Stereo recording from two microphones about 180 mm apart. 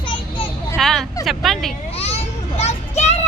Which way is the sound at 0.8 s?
Centre (ahead or behind).